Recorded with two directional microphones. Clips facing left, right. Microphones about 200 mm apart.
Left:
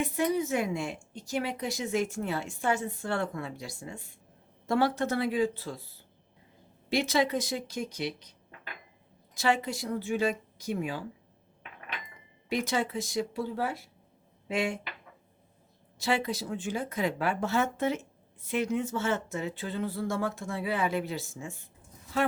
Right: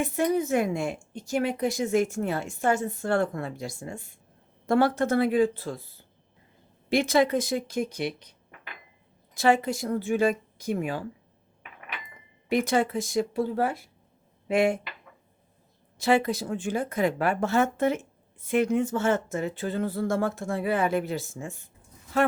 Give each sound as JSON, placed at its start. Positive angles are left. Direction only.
{"t": 0.0, "sound": "a woman's voice", "side_deg": -50}
{"t": 6.9, "sound": "a woman's voice", "side_deg": -50}
{"t": 9.3, "sound": "a woman's voice", "side_deg": -50}
{"t": 12.5, "sound": "a woman's voice", "side_deg": -55}
{"t": 16.0, "sound": "a woman's voice", "side_deg": -55}